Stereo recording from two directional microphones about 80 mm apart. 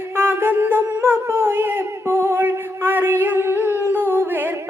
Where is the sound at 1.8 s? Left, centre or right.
Right.